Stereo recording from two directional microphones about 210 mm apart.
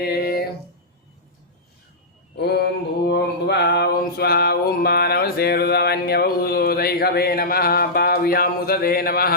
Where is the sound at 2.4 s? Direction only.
50° left (ahead or behind).